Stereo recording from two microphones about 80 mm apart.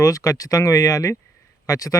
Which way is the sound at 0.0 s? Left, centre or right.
Left.